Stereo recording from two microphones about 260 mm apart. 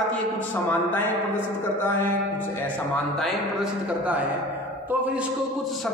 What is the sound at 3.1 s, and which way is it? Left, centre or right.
A man's voice, centre.